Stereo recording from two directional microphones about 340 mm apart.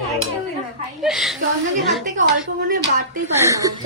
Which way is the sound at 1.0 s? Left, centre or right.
Centre.